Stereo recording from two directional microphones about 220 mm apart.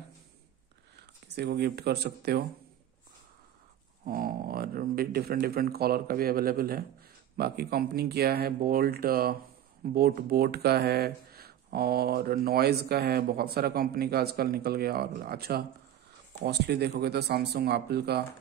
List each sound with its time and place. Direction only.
0.9 s speech: 50° right (ahead or behind)
4.0 s speech: 40° right (ahead or behind)